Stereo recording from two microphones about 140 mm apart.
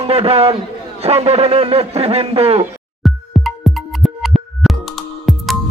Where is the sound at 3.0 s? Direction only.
Centre (ahead or behind).